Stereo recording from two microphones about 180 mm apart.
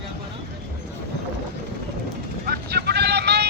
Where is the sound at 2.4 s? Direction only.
65° right (ahead or behind).